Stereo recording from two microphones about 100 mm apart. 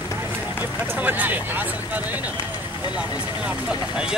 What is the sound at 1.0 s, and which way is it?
Speech, 15° right (ahead or behind).